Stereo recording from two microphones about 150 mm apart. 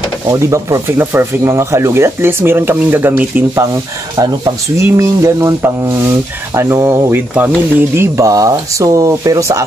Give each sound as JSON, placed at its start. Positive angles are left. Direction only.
{"t": 0.3, "sound": "speech", "side_deg": -20}
{"t": 4.7, "sound": "speech", "side_deg": -20}